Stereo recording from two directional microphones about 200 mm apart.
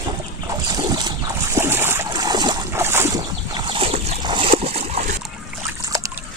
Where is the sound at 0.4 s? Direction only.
20° right (ahead or behind); by 5.1 s 35° right (ahead or behind).